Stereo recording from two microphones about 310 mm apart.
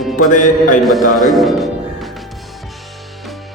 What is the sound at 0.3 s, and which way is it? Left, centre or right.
Speech, left.